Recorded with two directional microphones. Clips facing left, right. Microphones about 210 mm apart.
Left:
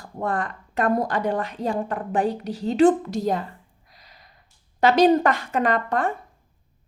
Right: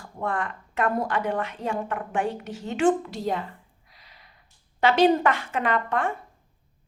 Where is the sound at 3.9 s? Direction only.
40° left (ahead or behind).